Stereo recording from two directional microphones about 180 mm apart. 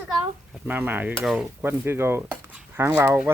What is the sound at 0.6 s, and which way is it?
Cutlery, 10° right (ahead or behind).